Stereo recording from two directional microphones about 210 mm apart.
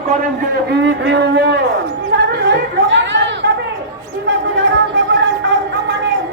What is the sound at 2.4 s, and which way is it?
Chatter, 55° right (ahead or behind).